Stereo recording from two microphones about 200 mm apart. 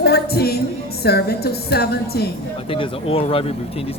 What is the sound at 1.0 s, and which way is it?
Speech, 55° left (ahead or behind).